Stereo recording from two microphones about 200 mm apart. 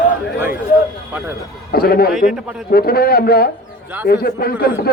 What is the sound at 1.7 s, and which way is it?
Speech, 50° left (ahead or behind).